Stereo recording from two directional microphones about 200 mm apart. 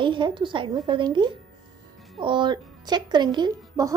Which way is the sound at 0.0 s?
25° right (ahead or behind).